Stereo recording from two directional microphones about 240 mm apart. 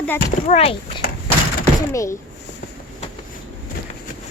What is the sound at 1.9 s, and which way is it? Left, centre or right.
Speech, centre.